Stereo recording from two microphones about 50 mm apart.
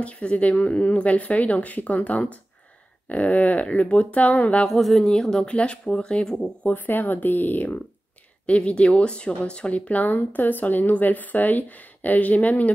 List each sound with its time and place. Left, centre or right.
0.0 s speech: left
4.6 s speech: centre
6.7 s speech: left
8.5 s speech: left